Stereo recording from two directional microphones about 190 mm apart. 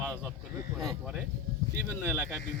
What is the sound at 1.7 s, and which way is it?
Speech, 15° right (ahead or behind).